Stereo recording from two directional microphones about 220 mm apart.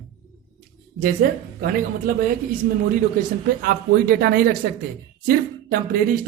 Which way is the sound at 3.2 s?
40° right (ahead or behind).